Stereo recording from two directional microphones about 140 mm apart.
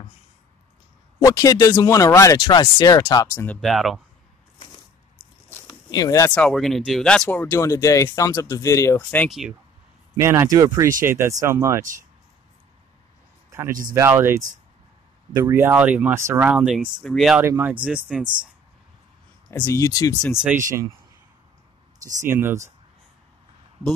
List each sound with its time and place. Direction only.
1.2 s speech: 25° left (ahead or behind)
3.4 s speech: centre (ahead or behind)
5.9 s speech: 25° left (ahead or behind)
6.2 s speech: 10° left (ahead or behind)
10.1 s speech: 20° right (ahead or behind)
13.5 s a sound: 20° right (ahead or behind)
13.9 s speech: 20° right (ahead or behind); by 17.4 s centre (ahead or behind)
17.4 s speech: 15° right (ahead or behind)
19.5 s speech: 20° left (ahead or behind)
22.0 s speech: 15° right (ahead or behind)